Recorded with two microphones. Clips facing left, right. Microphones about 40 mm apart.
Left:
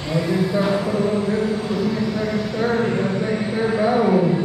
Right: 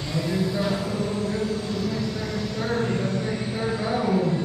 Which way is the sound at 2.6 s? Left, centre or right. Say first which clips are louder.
Left 5 dB; left.